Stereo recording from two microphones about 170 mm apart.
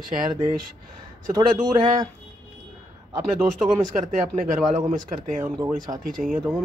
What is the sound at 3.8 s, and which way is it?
Speech, 50° right (ahead or behind).